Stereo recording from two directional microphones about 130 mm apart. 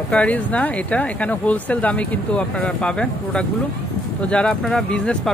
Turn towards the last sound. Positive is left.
turn(degrees=5)  # may be behind; listen again after turning